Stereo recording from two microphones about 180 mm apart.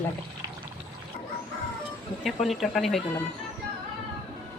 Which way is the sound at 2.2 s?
Centre (ahead or behind).